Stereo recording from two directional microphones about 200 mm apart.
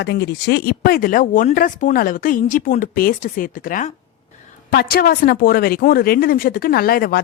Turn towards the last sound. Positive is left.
turn(degrees=50)  # may be behind; listen again after turning